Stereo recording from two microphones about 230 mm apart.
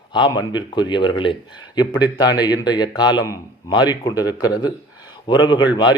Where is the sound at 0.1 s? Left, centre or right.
Centre.